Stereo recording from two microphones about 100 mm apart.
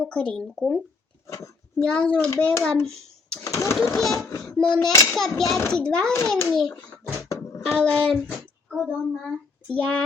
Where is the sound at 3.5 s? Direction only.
30° left (ahead or behind).